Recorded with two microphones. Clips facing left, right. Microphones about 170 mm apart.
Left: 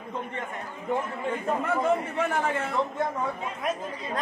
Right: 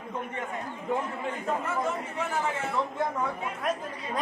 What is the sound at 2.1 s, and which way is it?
Speech, 60° left (ahead or behind).